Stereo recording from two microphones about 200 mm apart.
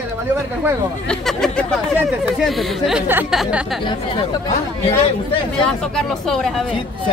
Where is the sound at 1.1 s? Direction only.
5° left (ahead or behind).